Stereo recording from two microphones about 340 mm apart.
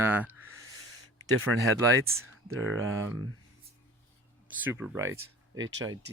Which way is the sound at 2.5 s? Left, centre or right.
Right.